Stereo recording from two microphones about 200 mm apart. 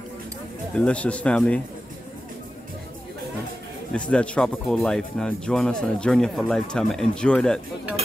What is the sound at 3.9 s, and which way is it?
Speech, 5° left (ahead or behind).